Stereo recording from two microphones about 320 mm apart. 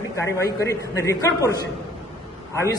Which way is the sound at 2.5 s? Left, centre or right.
Centre.